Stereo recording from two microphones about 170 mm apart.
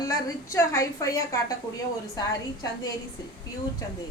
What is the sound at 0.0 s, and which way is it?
A woman's voice, 20° left (ahead or behind).